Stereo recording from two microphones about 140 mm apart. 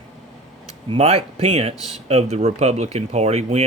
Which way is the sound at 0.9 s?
50° right (ahead or behind).